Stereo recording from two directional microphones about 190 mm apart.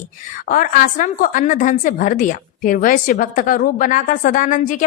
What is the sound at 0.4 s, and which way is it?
A woman's voice, 45° left (ahead or behind).